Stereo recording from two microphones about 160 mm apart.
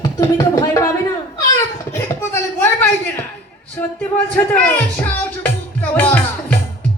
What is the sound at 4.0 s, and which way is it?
Music, 10° left (ahead or behind).